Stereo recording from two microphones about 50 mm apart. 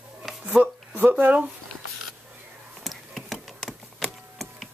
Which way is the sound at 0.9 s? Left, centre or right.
Right.